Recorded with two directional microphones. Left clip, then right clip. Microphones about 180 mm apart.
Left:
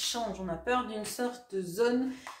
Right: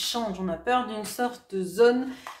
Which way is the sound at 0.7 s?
30° right (ahead or behind).